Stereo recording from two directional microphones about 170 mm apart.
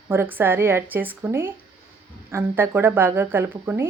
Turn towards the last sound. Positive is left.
turn(degrees=-10)  # may be behind; listen again after turning